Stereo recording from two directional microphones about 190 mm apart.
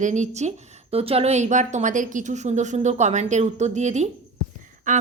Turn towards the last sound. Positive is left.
turn(degrees=-40)  # may be behind; listen again after turning